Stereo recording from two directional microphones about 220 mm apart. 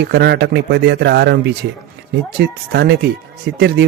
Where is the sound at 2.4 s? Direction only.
50° right (ahead or behind).